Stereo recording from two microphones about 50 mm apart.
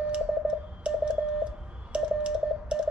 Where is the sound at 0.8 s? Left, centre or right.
Centre.